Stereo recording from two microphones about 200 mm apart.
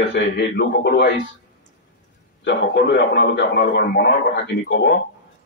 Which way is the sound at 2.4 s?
60° left (ahead or behind).